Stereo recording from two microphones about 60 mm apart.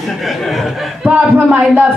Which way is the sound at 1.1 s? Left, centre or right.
Right.